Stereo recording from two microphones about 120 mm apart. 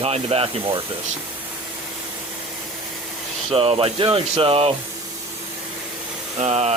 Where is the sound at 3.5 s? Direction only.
50° right (ahead or behind).